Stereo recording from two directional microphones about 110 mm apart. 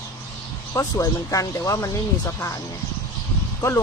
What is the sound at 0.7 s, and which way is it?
Speech, 30° left (ahead or behind).